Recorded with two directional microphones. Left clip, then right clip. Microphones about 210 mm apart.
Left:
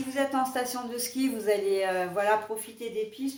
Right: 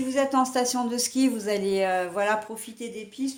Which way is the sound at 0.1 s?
45° right (ahead or behind).